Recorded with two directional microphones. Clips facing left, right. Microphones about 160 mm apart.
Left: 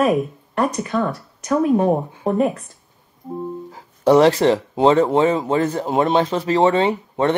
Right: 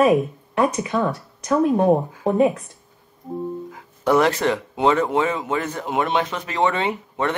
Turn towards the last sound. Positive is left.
turn(degrees=35)  # may be behind; listen again after turning